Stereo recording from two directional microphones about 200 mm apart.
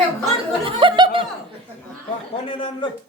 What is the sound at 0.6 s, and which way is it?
Snicker, 25° right (ahead or behind).